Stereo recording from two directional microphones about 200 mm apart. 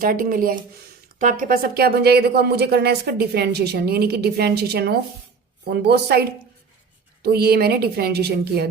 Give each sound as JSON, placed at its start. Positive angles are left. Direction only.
{"t": 0.0, "sound": "speech", "side_deg": -45}